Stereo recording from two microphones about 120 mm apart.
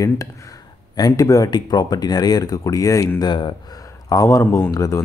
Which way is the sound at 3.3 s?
45° left (ahead or behind).